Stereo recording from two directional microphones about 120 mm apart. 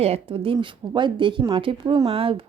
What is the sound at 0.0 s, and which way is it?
Speech, 55° right (ahead or behind).